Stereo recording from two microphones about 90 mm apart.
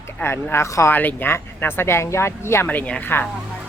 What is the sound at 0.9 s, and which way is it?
Speech, 20° left (ahead or behind).